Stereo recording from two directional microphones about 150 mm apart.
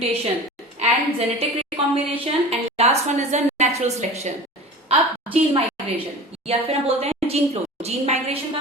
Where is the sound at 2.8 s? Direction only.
45° right (ahead or behind).